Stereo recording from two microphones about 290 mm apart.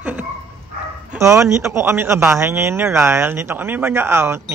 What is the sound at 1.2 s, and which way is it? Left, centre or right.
A man's voice, centre.